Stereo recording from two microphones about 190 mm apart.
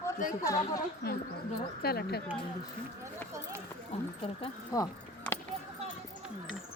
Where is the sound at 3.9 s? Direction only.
35° left (ahead or behind).